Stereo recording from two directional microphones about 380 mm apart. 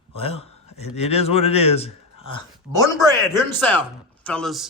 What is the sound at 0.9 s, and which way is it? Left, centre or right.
Speech, centre.